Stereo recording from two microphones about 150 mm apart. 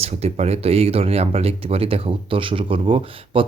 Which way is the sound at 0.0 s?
45° right (ahead or behind).